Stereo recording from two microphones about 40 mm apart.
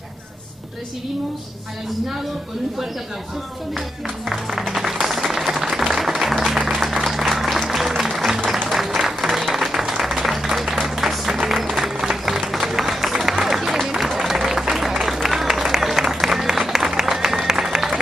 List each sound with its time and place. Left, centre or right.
4.3 s music: centre
5.0 s applause: centre
5.6 s music: centre
6.7 s applause: centre
9.0 s music: centre
11.7 s applause: centre